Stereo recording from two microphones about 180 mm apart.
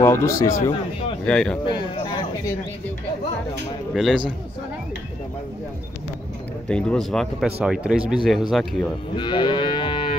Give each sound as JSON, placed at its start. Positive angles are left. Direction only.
{"t": 0.0, "sound": "speech", "side_deg": 15}
{"t": 1.2, "sound": "speech", "side_deg": 5}
{"t": 3.9, "sound": "speech", "side_deg": 0}
{"t": 6.7, "sound": "speech", "side_deg": 5}
{"t": 9.1, "sound": "moo", "side_deg": 25}